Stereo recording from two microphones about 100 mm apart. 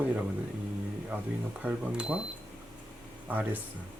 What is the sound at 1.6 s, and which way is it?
Speech, 15° right (ahead or behind).